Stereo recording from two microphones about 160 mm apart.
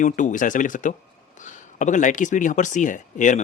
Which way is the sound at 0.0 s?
50° left (ahead or behind).